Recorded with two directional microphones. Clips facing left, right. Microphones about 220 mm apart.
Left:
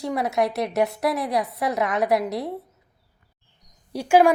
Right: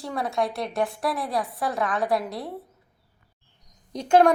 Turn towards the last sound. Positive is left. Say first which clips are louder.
# left 1 dB
turn(degrees=10)  # may be behind; listen again after turning